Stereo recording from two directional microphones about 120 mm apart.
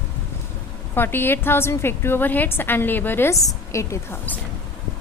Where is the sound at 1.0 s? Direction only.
20° left (ahead or behind).